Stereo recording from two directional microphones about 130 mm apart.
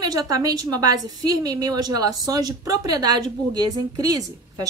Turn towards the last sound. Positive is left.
turn(degrees=-25)  # may be behind; listen again after turning